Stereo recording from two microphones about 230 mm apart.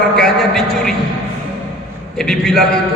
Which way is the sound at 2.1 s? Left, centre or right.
Centre.